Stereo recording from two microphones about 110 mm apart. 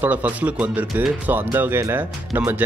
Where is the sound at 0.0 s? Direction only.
15° right (ahead or behind).